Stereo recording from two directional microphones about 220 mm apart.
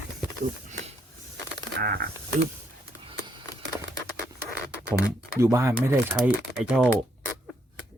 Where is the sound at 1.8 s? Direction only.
45° right (ahead or behind).